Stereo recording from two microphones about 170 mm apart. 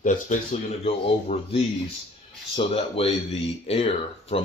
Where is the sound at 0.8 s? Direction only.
40° left (ahead or behind).